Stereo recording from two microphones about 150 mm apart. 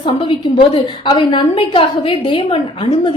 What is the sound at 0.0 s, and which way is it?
A woman's voice, 35° left (ahead or behind).